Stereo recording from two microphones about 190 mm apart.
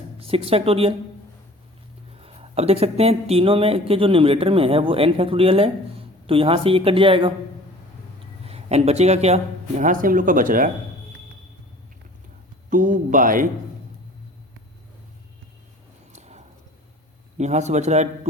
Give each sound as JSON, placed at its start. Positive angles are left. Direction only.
{"t": 0.2, "sound": "speech", "side_deg": -30}
{"t": 2.2, "sound": "speech", "side_deg": -30}
{"t": 8.4, "sound": "speech", "side_deg": -35}
{"t": 12.7, "sound": "speech", "side_deg": -45}
{"t": 16.1, "sound": "a sound", "side_deg": -35}
{"t": 17.3, "sound": "speech", "side_deg": -35}